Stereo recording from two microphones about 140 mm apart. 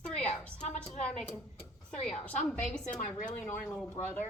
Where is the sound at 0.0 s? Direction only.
10° left (ahead or behind).